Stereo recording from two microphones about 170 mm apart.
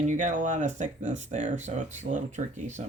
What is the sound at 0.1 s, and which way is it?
Speech, 45° right (ahead or behind).